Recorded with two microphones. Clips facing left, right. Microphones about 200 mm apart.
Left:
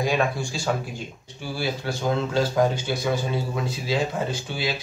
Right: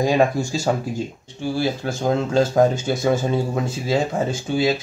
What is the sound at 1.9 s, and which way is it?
Speech, 45° right (ahead or behind).